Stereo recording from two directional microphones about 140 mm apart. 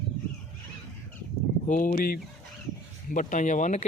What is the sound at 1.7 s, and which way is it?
Speech, 75° left (ahead or behind).